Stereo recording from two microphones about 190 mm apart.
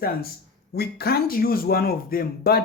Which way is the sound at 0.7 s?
55° left (ahead or behind).